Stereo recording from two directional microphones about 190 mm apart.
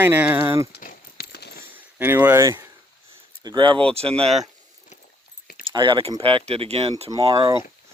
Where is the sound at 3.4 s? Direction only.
25° right (ahead or behind).